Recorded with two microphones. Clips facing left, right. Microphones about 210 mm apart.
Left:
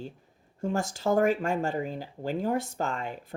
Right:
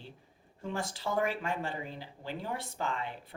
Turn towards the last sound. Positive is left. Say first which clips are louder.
# left 4 dB
turn(degrees=45)  # may be behind; listen again after turning